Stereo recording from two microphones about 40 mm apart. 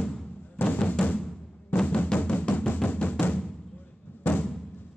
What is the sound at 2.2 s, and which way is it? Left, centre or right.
Drum, left.